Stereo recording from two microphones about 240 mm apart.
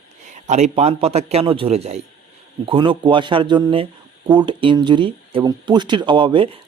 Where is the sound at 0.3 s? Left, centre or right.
Right.